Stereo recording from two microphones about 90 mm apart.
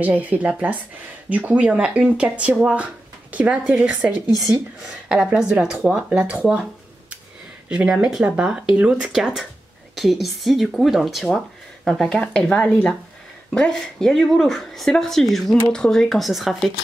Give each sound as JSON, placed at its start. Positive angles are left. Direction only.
{"t": 0.0, "sound": "speech", "side_deg": -20}
{"t": 7.7, "sound": "speech", "side_deg": -10}